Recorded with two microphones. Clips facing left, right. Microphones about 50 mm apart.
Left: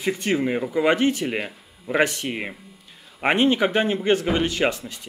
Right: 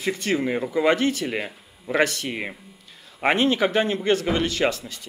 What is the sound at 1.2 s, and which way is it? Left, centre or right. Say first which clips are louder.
Speech: left 1 dB; centre.